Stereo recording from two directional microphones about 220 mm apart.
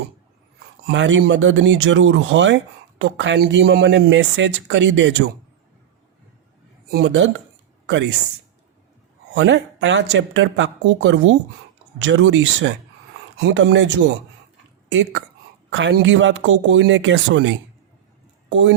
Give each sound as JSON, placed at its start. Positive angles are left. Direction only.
{"t": 0.9, "sound": "speech", "side_deg": -55}
{"t": 6.9, "sound": "speech", "side_deg": -55}
{"t": 9.3, "sound": "speech", "side_deg": -55}
{"t": 15.7, "sound": "speech", "side_deg": -55}